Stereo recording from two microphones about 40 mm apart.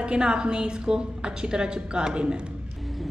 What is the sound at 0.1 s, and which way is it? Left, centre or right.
A woman's voice, right.